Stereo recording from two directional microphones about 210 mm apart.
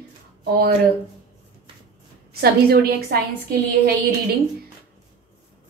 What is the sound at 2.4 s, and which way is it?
Speech, 45° right (ahead or behind).